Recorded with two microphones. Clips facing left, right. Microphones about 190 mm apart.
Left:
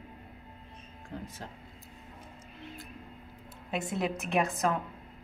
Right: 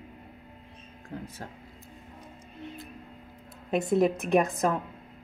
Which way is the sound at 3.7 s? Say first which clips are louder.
Right 8 dB; 50° right (ahead or behind).